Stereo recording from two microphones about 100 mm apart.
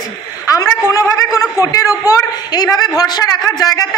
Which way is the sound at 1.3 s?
35° left (ahead or behind).